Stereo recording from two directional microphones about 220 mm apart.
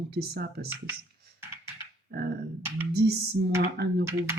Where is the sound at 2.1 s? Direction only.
45° right (ahead or behind).